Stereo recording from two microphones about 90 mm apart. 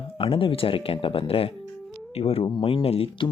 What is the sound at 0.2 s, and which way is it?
Speech, 80° left.